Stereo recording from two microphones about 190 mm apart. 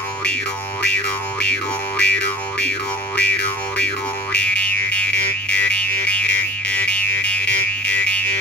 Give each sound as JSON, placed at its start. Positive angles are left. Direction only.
{"t": 0.8, "sound": "music", "side_deg": 5}